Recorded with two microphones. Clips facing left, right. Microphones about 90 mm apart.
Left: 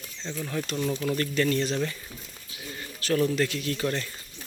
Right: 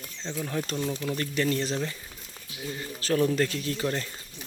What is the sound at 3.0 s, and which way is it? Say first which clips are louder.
Speech: even; 30° right (ahead or behind).